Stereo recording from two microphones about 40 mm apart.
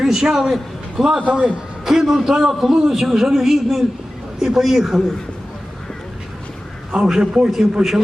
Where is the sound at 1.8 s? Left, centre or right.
Centre.